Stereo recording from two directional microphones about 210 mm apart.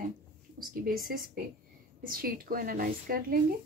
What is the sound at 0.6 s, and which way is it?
A woman's voice, 40° right (ahead or behind).